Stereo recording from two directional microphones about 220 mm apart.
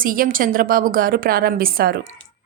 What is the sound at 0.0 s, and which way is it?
Speech, 40° right (ahead or behind).